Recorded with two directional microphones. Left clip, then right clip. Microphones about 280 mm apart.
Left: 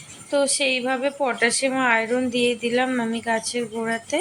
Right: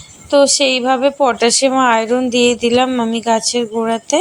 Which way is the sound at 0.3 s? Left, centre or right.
Centre.